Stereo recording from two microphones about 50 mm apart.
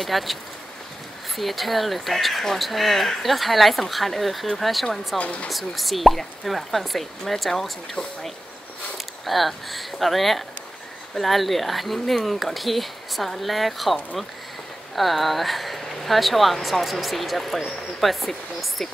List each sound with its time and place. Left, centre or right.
0.0 s speech: centre
5.1 s speech: left
5.5 s speech: centre
7.9 s speech: centre
8.9 s speech: centre
15.0 s speech: centre